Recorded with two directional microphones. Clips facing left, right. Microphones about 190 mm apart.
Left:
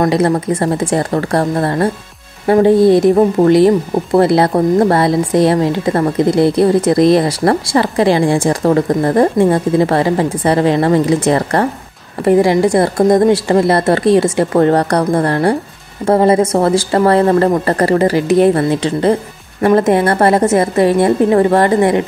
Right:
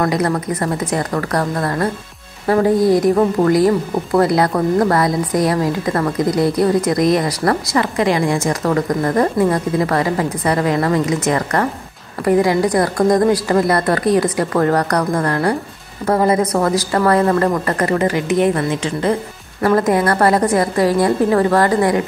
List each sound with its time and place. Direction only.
0.0 s a woman's voice: 25° left (ahead or behind)